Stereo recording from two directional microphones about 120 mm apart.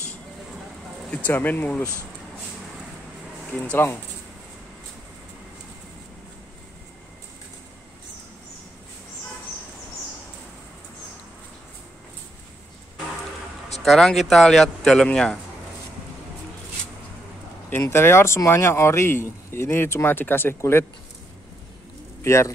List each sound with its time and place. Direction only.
1.1 s speech: 15° left (ahead or behind)
3.7 s speech: 20° left (ahead or behind)
13.8 s speech: centre (ahead or behind)
17.6 s speech: 20° left (ahead or behind)
22.2 s speech: 25° left (ahead or behind)